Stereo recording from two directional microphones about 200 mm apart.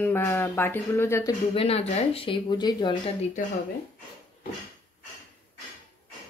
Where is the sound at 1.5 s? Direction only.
30° left (ahead or behind).